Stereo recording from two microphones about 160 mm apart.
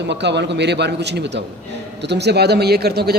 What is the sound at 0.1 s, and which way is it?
A man's voice, 90° right.